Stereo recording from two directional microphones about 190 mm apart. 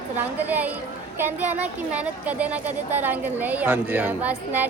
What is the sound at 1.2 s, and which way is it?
Speech, 10° right (ahead or behind).